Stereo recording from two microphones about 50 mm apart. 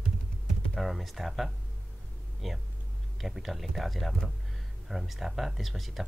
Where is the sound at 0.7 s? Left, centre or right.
Centre.